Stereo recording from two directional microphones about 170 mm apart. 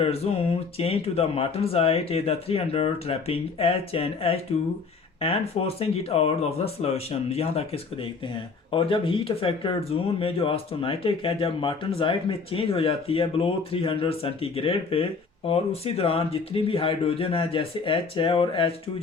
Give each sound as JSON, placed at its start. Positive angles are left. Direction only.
{"t": 0.0, "sound": "speech", "side_deg": 35}